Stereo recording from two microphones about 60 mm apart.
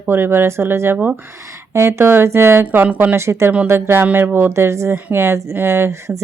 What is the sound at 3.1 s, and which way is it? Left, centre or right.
A woman's voice, right.